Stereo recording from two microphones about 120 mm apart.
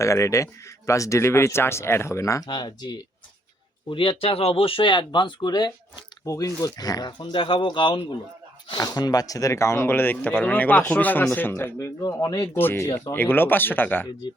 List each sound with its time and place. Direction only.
0.0 s speech: 25° left (ahead or behind)
2.5 s speech: 40° left (ahead or behind); by 14.1 s 15° left (ahead or behind)